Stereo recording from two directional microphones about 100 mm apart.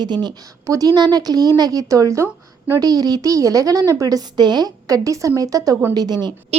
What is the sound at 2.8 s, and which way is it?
A woman's voice, 40° right (ahead or behind).